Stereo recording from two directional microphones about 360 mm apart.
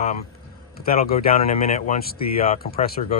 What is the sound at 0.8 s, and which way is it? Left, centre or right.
Speech, left.